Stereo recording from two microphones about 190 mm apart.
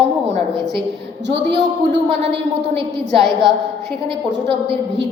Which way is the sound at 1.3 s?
70° right (ahead or behind).